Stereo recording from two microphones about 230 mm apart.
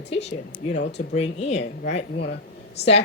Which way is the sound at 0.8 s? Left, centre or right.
Left.